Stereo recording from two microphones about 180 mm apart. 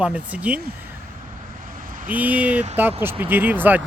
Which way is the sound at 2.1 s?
10° right (ahead or behind).